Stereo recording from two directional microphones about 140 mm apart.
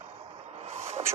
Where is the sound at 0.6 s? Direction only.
45° right (ahead or behind).